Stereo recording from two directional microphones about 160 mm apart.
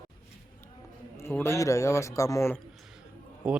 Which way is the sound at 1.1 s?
15° left (ahead or behind).